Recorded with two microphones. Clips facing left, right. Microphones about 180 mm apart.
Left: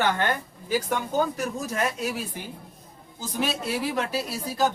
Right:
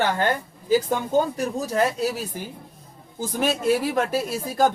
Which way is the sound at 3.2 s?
50° right (ahead or behind).